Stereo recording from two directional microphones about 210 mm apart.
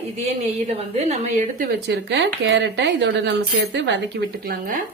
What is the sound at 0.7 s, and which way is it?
Speech, 30° right (ahead or behind).